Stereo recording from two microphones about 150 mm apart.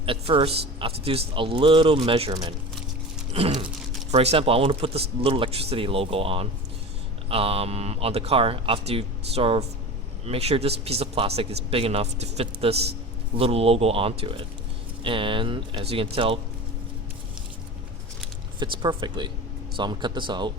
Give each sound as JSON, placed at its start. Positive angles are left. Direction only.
{"t": 0.0, "sound": "a man's voice", "side_deg": -35}
{"t": 2.3, "sound": "a man's voice", "side_deg": -25}
{"t": 3.3, "sound": "a man's voice", "side_deg": -40}
{"t": 18.6, "sound": "a man's voice", "side_deg": -30}